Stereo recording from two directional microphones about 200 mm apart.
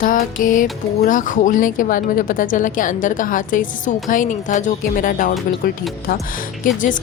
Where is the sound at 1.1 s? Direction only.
40° left (ahead or behind).